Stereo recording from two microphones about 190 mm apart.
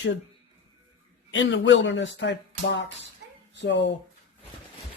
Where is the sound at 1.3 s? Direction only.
75° left (ahead or behind).